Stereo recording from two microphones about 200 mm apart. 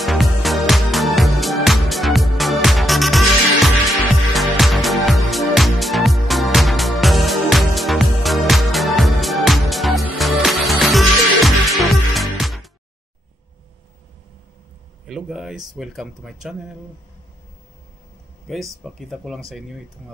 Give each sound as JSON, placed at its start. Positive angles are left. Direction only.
{"t": 0.0, "sound": "music", "side_deg": 0}
{"t": 15.0, "sound": "speech", "side_deg": 0}
{"t": 18.9, "sound": "speech", "side_deg": 0}